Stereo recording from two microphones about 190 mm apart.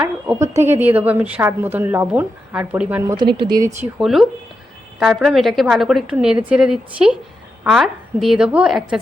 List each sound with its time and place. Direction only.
0.0 s a woman's voice: 10° right (ahead or behind)
3.3 s a woman's voice: 25° right (ahead or behind)
4.0 s a woman's voice: centre (ahead or behind)